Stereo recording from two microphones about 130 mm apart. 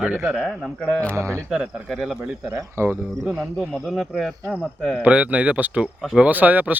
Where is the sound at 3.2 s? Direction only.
5° right (ahead or behind).